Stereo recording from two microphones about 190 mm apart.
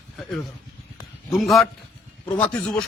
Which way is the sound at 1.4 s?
Centre (ahead or behind).